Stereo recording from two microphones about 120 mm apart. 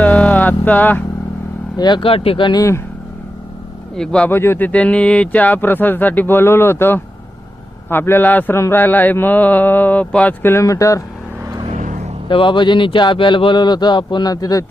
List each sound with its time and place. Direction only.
0.0 s a sound: 10° left (ahead or behind)
1.7 s speech: 35° left (ahead or behind)
2.5 s speech: 25° left (ahead or behind)
3.9 s mantra: 5° left (ahead or behind)
4.3 s mantra: 20° left (ahead or behind)
11.7 s vehicle: 85° right
12.3 s speech: 45° left (ahead or behind)